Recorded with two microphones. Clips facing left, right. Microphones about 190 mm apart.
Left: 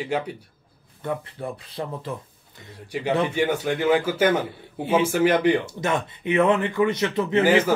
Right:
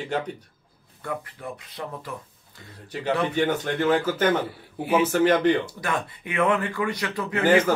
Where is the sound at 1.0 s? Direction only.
25° left (ahead or behind).